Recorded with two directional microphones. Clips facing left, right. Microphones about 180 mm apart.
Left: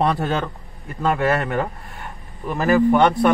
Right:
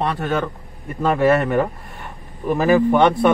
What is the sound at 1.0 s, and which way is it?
Speech, centre (ahead or behind).